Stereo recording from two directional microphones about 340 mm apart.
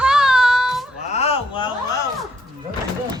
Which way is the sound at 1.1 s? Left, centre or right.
Centre.